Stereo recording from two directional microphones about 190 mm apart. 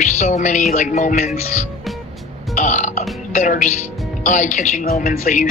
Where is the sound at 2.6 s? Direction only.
40° left (ahead or behind).